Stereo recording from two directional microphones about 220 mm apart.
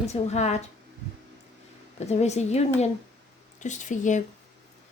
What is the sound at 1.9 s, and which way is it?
Music, 30° left (ahead or behind).